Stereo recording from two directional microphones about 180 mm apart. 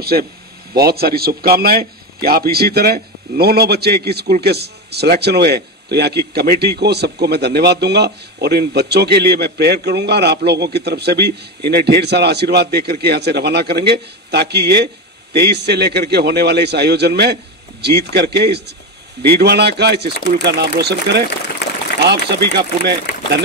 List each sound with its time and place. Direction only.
0.0 s a man's voice: 60° right (ahead or behind)